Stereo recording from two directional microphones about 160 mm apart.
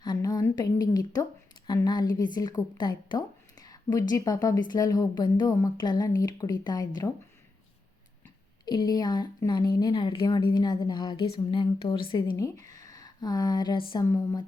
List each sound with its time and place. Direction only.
0.0 s a woman's voice: 25° left (ahead or behind)
8.6 s a woman's voice: 25° left (ahead or behind)